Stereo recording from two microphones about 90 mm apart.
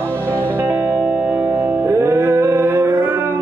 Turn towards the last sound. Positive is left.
turn(degrees=-25)  # may be behind; listen again after turning